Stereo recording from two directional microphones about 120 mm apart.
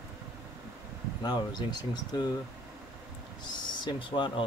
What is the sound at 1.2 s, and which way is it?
Speech, 35° left (ahead or behind).